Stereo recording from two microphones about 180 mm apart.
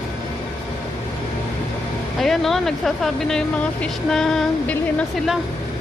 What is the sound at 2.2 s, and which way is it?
Speech, centre (ahead or behind).